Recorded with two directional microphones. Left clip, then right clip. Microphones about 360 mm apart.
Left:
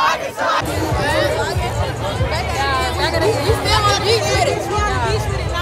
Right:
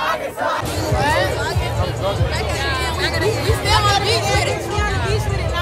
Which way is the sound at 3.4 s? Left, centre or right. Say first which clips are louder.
Left 1 dB; centre.